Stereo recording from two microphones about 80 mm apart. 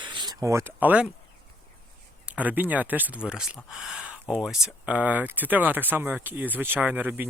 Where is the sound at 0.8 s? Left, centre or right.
Right.